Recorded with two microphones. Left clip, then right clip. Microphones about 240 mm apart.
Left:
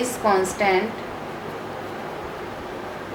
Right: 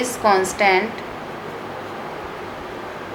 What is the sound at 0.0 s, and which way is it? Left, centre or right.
Speech, centre.